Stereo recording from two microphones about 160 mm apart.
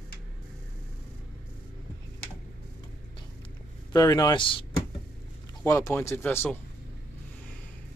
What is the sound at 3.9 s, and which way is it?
Speech, 20° left (ahead or behind).